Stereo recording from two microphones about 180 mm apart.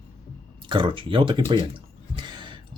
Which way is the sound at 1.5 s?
25° right (ahead or behind).